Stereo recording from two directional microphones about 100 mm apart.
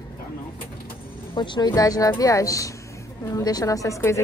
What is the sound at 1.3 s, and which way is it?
Speech, 50° left (ahead or behind).